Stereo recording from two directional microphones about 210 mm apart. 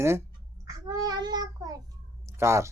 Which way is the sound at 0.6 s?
15° right (ahead or behind).